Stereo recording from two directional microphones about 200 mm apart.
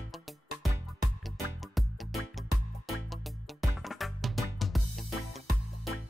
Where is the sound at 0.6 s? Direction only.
Centre (ahead or behind).